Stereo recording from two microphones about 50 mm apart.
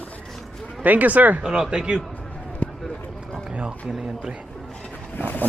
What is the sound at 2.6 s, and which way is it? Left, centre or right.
Run, left.